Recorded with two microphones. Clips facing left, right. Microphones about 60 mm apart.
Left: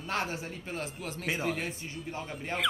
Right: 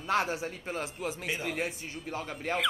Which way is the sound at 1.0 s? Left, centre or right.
Centre.